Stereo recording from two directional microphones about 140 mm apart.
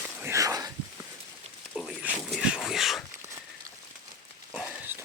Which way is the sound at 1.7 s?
5° left (ahead or behind).